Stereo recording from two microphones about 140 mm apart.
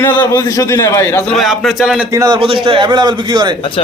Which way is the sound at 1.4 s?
Centre (ahead or behind).